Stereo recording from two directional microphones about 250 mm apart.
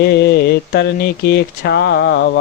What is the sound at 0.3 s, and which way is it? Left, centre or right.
Speech, left.